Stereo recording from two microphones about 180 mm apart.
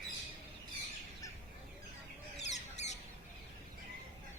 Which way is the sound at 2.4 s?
40° left (ahead or behind).